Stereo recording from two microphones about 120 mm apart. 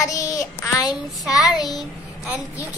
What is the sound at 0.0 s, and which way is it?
Child singing, 30° left (ahead or behind).